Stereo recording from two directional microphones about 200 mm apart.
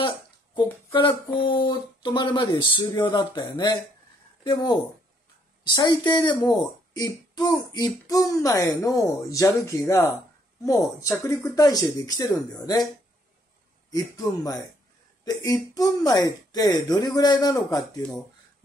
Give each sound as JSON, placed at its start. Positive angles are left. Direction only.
{"t": 0.6, "sound": "speech", "side_deg": 25}
{"t": 13.8, "sound": "speech", "side_deg": 15}